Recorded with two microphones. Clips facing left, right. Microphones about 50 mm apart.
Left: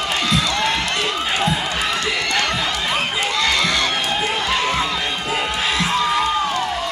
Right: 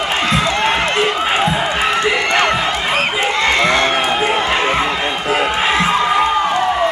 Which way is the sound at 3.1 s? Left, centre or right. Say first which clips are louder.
Right 4 dB; right.